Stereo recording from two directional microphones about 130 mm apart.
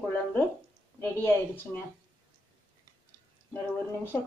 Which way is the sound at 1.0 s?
15° left (ahead or behind).